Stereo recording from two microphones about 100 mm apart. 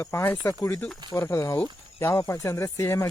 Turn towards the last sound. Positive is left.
turn(degrees=30)  # may be behind; listen again after turning